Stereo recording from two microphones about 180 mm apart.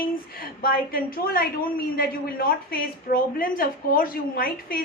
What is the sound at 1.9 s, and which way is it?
A woman's voice, 55° left (ahead or behind).